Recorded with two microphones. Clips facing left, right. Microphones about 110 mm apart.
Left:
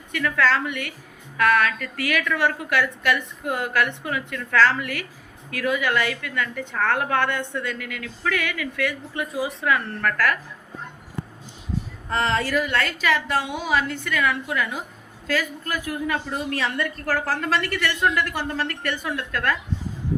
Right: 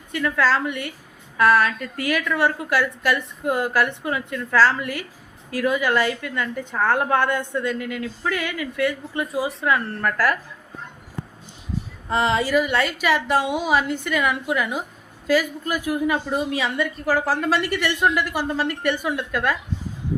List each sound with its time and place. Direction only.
0.1 s a woman's voice: 25° right (ahead or behind)
12.0 s a woman's voice: 15° right (ahead or behind)